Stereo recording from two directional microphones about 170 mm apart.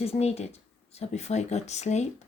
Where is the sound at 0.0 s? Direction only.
35° left (ahead or behind).